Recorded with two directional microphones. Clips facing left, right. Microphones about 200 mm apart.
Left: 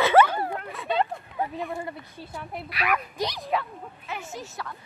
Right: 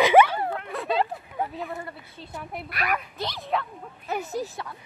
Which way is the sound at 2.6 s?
45° right (ahead or behind).